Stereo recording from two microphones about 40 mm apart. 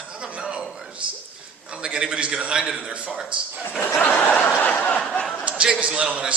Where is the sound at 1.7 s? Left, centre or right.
Right.